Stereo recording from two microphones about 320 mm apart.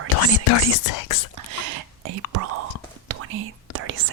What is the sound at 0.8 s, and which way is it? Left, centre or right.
Speech, left.